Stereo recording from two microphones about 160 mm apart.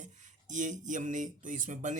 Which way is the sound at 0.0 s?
50° right (ahead or behind).